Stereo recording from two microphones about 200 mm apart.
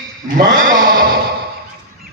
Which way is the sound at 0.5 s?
45° right (ahead or behind).